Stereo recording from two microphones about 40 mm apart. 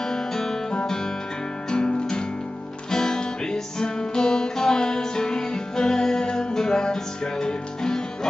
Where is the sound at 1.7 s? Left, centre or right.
Left.